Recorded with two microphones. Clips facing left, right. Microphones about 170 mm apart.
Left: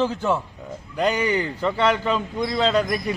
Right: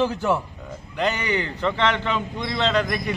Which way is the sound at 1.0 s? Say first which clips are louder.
Left 3 dB; 10° left (ahead or behind).